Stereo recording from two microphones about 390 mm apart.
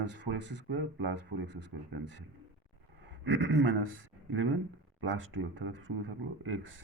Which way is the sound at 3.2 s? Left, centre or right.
Right.